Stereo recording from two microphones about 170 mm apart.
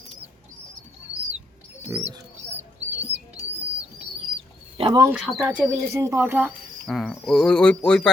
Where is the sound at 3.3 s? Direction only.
5° right (ahead or behind).